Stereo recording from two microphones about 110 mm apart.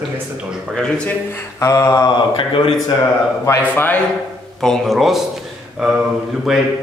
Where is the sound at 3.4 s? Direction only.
30° left (ahead or behind).